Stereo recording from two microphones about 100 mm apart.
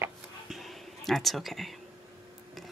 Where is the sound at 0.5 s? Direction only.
Centre (ahead or behind).